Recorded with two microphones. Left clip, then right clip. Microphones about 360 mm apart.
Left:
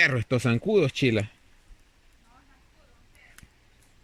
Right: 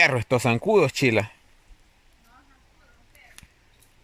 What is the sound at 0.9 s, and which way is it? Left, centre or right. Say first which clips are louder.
Speech: right 3 dB; right.